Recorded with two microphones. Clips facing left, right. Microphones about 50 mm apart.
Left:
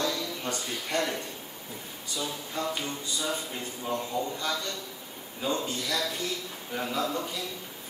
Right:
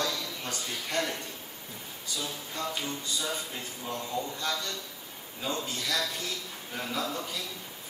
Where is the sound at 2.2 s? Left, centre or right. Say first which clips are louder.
Left 3 dB; centre.